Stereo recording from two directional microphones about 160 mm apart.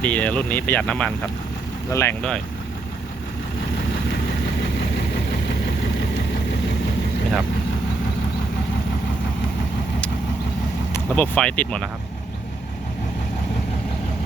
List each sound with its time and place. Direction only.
0.0 s speech: 10° left (ahead or behind)
10.9 s speech: 10° left (ahead or behind)